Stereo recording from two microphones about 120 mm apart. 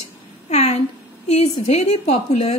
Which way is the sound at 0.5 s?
65° left (ahead or behind).